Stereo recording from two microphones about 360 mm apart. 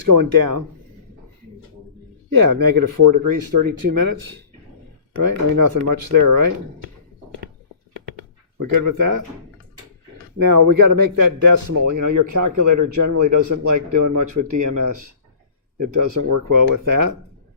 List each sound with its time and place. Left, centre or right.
0.0 s speech: right
2.3 s speech: right
8.5 s speech: right
10.3 s a man's voice: right
16.3 s speech: right